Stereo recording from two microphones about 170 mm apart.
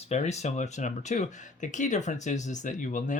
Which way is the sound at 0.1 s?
40° left (ahead or behind).